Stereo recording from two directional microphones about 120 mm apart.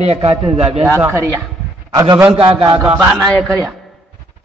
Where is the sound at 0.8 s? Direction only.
20° right (ahead or behind).